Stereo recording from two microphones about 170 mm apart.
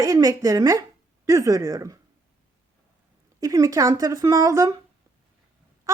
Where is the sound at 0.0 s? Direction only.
20° right (ahead or behind).